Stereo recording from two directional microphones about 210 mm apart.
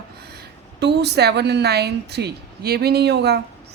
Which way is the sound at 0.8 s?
55° right (ahead or behind).